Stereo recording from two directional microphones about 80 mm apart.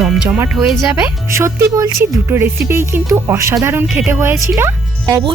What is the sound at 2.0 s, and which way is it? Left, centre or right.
Speech, right.